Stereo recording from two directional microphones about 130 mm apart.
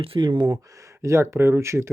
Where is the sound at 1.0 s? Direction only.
20° right (ahead or behind).